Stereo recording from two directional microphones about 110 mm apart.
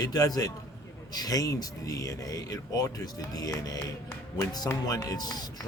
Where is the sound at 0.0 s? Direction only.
35° left (ahead or behind).